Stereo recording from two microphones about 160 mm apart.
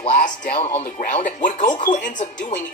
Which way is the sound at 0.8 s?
60° left (ahead or behind).